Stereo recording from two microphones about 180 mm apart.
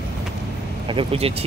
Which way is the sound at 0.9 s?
30° right (ahead or behind).